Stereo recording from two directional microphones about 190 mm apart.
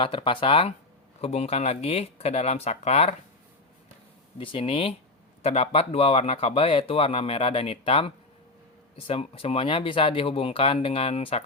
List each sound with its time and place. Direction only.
0.0 s speech: 25° left (ahead or behind)
4.4 s speech: 30° left (ahead or behind)